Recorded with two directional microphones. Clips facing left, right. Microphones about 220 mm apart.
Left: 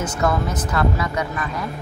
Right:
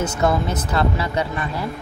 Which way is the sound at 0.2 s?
30° right (ahead or behind).